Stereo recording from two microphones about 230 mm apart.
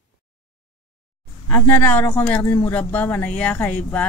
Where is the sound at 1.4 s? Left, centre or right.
Centre.